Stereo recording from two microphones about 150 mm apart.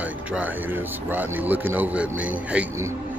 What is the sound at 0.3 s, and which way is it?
A man's voice, 10° right (ahead or behind).